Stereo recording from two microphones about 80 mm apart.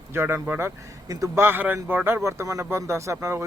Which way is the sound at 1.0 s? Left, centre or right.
Right.